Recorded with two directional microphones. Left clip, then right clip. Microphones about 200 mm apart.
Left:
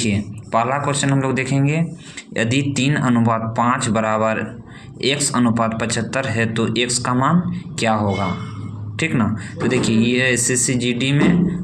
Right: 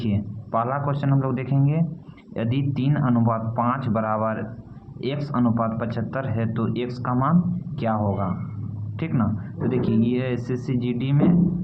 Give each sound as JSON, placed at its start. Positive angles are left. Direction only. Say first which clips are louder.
{"t": 0.0, "sound": "speech", "louder": "left 7 dB", "side_deg": 15}
{"t": 9.0, "sound": "speech", "louder": "left 7 dB", "side_deg": 15}